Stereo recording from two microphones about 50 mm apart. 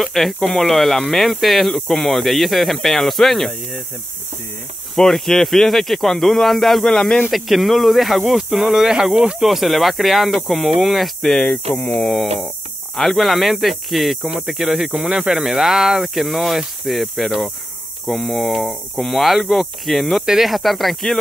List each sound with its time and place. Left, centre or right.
0.0 s speech: centre
4.9 s speech: centre
7.2 s speech: centre
11.5 s speech: left
12.1 s speech: centre
15.3 s speech: centre